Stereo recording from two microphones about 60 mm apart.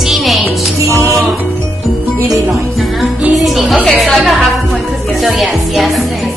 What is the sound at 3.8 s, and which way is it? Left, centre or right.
Speech, centre.